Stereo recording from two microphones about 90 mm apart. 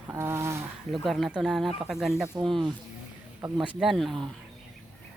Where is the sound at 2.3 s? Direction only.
35° right (ahead or behind).